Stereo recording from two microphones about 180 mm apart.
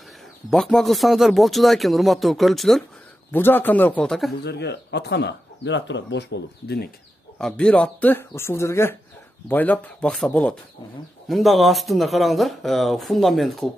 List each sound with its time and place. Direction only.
0.5 s speech: 5° left (ahead or behind)
3.3 s speech: 10° left (ahead or behind)
4.3 s speech: 65° left (ahead or behind)
7.3 s speech: 5° left (ahead or behind)